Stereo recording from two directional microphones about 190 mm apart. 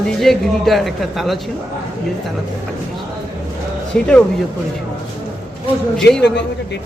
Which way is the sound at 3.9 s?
5° left (ahead or behind).